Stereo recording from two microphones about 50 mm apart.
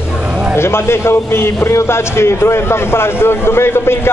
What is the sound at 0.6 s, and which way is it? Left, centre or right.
A man's voice, left.